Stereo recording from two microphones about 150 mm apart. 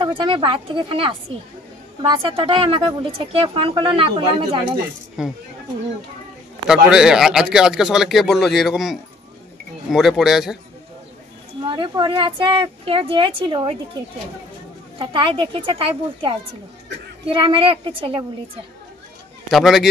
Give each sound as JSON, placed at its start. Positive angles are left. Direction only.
{"t": 0.0, "sound": "a woman's voice", "side_deg": -35}
{"t": 5.2, "sound": "a man's voice", "side_deg": -5}
{"t": 6.7, "sound": "a man's voice", "side_deg": -5}
{"t": 11.6, "sound": "a woman's voice", "side_deg": -30}
{"t": 15.0, "sound": "a woman's voice", "side_deg": -35}
{"t": 19.5, "sound": "a man's voice", "side_deg": 0}